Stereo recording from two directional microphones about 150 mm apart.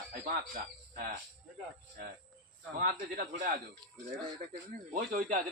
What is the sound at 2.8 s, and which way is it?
Speech, 70° right (ahead or behind).